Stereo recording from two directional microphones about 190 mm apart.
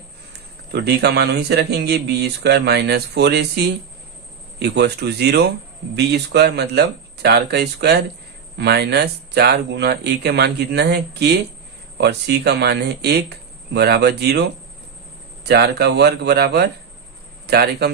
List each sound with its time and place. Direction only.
0.7 s speech: 60° right (ahead or behind)
4.6 s speech: 60° right (ahead or behind)